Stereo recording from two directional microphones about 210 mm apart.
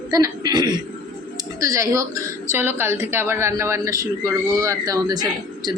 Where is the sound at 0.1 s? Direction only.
20° right (ahead or behind).